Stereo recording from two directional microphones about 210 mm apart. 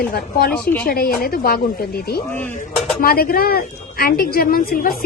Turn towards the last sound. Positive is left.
turn(degrees=45)  # may be behind; listen again after turning